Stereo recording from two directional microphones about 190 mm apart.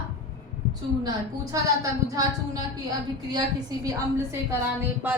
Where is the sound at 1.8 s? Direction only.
20° right (ahead or behind).